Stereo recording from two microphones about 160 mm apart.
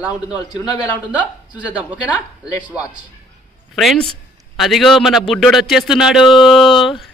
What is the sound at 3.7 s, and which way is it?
A man's voice, centre (ahead or behind).